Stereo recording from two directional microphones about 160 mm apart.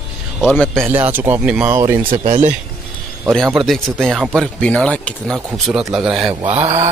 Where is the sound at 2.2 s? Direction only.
45° right (ahead or behind).